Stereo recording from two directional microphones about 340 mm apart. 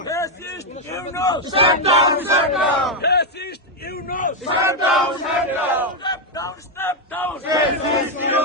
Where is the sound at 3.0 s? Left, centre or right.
Left.